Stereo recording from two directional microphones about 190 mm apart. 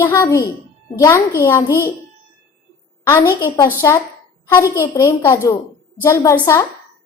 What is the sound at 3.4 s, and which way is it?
A woman's voice, 15° left (ahead or behind).